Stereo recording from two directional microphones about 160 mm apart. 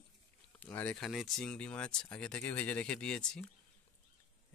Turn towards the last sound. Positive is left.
turn(degrees=5)  # may be behind; listen again after turning